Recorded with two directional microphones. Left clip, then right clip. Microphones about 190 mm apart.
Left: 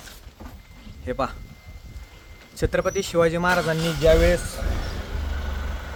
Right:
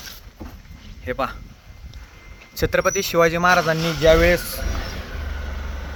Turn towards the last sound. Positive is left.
turn(degrees=-30)  # may be behind; listen again after turning